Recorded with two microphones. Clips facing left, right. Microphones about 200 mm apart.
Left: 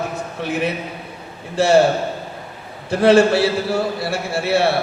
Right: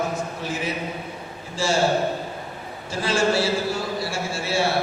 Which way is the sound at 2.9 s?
60° left (ahead or behind).